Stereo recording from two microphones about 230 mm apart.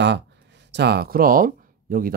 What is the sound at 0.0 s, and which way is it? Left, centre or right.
Speech, right.